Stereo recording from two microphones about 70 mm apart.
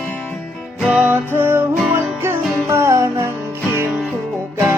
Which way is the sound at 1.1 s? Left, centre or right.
Right.